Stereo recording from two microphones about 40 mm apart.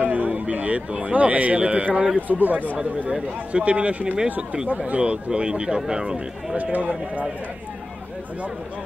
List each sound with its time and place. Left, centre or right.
0.0 s a sound: right
1.0 s a man's voice: right
3.1 s a man's voice: right
6.5 s a man's voice: right